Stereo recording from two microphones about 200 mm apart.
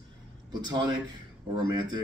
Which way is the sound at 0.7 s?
20° right (ahead or behind).